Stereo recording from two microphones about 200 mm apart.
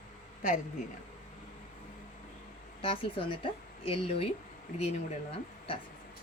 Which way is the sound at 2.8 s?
25° left (ahead or behind).